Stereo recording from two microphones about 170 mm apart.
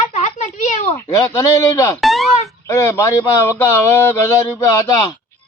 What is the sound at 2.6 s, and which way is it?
A man's voice, 15° left (ahead or behind).